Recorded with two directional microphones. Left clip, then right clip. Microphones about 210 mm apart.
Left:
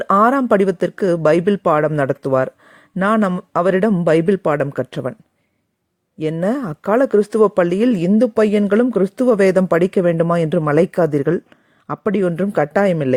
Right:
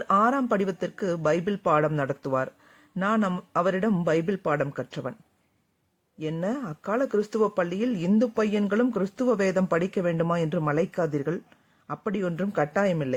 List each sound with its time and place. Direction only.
0.0 s speech: 35° left (ahead or behind)
6.4 s speech: 35° left (ahead or behind)